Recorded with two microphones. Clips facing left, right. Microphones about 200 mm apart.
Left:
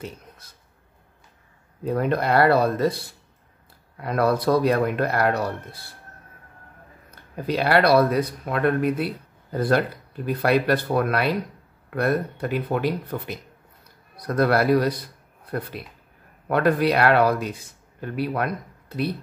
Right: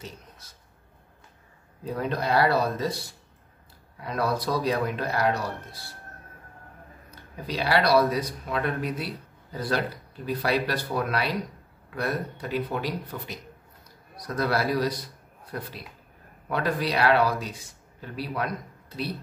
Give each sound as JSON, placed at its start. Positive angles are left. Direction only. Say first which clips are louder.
{"t": 1.9, "sound": "speech", "louder": "left 5 dB", "side_deg": 60}
{"t": 7.4, "sound": "a man's voice", "louder": "left 5 dB", "side_deg": 55}